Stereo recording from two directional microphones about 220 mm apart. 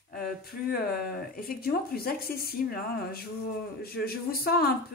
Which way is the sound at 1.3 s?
45° left (ahead or behind).